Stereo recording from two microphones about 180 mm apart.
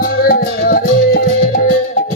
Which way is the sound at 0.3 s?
55° left (ahead or behind).